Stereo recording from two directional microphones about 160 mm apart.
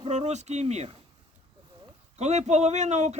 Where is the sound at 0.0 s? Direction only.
45° right (ahead or behind).